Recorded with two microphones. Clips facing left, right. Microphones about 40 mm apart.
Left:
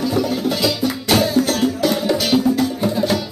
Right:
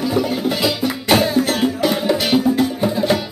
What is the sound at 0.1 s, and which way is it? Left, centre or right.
Music, centre.